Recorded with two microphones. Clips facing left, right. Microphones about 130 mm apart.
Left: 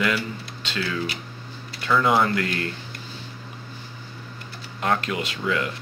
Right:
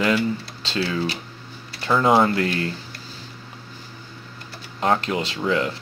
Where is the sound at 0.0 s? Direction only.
30° right (ahead or behind).